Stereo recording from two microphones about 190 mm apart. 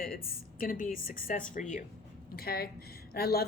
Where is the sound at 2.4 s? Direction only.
55° left (ahead or behind).